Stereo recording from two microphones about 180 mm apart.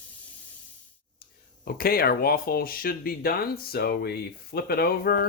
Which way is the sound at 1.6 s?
55° left (ahead or behind).